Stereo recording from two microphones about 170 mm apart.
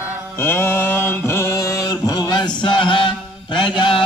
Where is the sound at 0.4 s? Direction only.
15° left (ahead or behind).